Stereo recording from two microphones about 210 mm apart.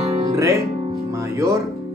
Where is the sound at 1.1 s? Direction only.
15° right (ahead or behind).